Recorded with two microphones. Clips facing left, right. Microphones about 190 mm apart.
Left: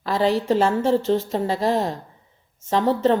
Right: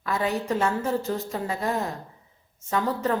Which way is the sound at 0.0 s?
30° left (ahead or behind).